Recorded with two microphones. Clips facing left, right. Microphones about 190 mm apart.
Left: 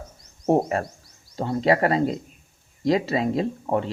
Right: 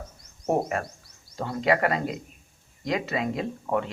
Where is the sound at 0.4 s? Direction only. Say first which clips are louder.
Left 5 dB; 30° left (ahead or behind).